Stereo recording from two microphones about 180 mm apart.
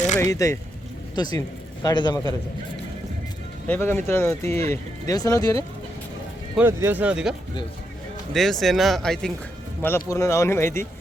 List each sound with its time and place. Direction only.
0.2 s speech: 15° left (ahead or behind)
3.7 s speech: 10° left (ahead or behind)
6.6 s speech: 15° right (ahead or behind); by 9.3 s 5° left (ahead or behind)
9.8 s speech: 15° left (ahead or behind)